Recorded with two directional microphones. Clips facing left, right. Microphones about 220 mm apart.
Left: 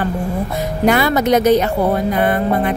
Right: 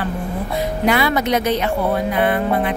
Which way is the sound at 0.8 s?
45° left (ahead or behind).